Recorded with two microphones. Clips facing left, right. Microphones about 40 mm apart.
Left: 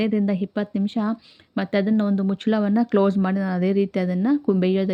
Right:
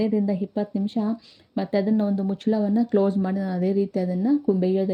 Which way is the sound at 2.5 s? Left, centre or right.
Left.